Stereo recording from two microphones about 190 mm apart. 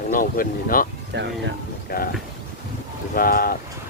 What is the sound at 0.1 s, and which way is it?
Speech, 45° left (ahead or behind).